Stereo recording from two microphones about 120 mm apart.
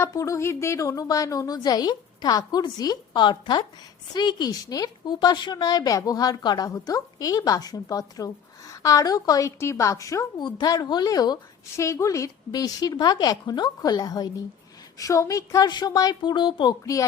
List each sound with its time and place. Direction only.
0.0 s a woman's voice: 25° left (ahead or behind)
16.8 s speech: 30° left (ahead or behind)